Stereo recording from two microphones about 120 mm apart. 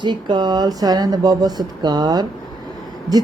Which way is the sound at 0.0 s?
40° right (ahead or behind).